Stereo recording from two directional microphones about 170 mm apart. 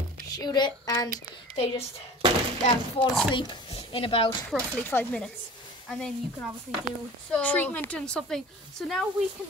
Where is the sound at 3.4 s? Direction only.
30° left (ahead or behind).